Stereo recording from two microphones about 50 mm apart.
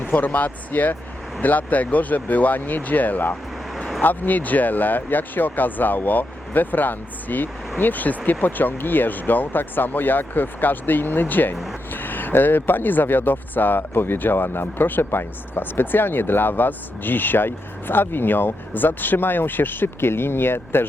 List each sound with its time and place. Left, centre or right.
0.0 s speech: left